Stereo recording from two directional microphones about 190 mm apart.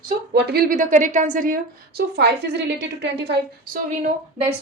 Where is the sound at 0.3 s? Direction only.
55° right (ahead or behind).